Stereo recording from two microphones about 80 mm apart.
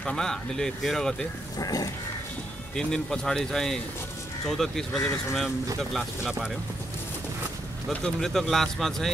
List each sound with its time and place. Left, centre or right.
0.0 s speech: centre
1.6 s a sound: left
2.7 s speech: centre
7.9 s speech: centre